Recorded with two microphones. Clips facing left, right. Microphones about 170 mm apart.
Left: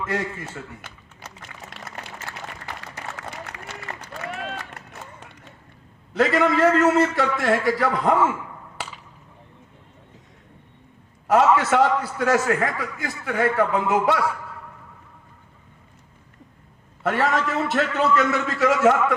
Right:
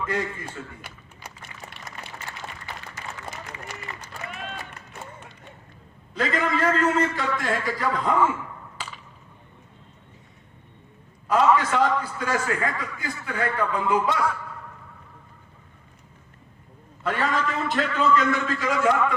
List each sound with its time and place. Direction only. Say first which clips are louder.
0.0 s a man's voice: left 1 dB; 75° left (ahead or behind)
1.4 s a sound: left 4 dB; 90° left; by 4.8 s 75° left (ahead or behind)
6.1 s a man's voice: left 6 dB; 75° left (ahead or behind)
11.3 s a man's voice: left 3 dB; 80° left
17.0 s a man's voice: left 3 dB; 75° left (ahead or behind)